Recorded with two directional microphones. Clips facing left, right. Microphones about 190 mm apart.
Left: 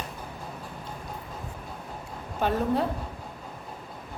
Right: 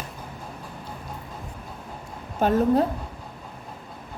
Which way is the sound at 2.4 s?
45° right (ahead or behind).